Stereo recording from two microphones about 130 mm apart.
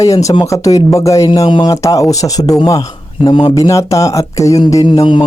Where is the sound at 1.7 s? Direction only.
25° left (ahead or behind).